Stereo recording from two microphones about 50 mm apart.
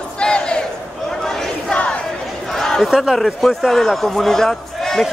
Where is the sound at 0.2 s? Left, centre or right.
Centre.